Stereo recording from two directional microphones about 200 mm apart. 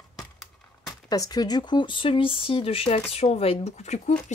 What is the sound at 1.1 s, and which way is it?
Speech, 20° left (ahead or behind).